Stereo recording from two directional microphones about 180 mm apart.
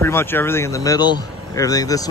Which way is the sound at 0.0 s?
10° left (ahead or behind).